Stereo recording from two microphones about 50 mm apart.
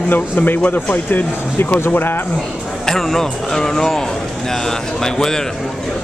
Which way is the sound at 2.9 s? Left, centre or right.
Centre.